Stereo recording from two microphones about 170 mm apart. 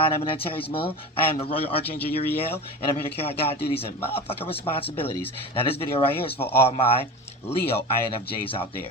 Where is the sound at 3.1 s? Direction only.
35° left (ahead or behind).